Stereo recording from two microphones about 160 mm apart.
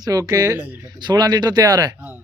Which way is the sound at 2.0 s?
10° right (ahead or behind).